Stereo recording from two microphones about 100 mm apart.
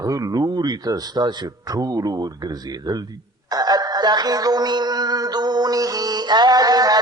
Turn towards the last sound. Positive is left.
turn(degrees=-40)  # may be behind; listen again after turning